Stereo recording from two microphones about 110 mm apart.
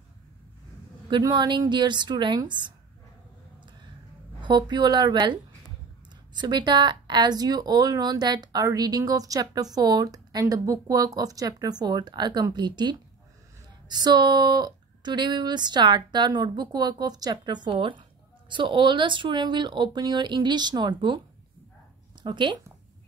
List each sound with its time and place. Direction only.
1.1 s speech: 40° right (ahead or behind)
4.4 s speech: 45° right (ahead or behind)
22.2 s speech: 45° right (ahead or behind)